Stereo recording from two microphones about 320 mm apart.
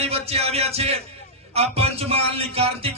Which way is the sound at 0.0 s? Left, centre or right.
Centre.